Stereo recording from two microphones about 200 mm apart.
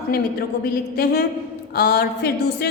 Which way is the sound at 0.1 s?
50° left (ahead or behind).